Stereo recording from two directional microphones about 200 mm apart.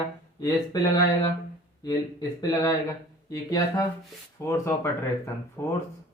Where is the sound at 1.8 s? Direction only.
20° left (ahead or behind).